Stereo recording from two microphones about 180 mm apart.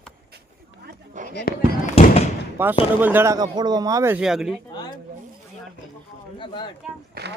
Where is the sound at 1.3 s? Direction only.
70° left (ahead or behind).